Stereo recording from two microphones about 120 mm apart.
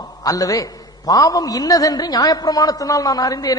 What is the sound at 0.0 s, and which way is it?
A man's voice, 30° left (ahead or behind).